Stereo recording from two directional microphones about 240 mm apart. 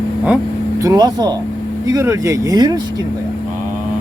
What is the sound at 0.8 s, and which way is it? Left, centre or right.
Speech, centre.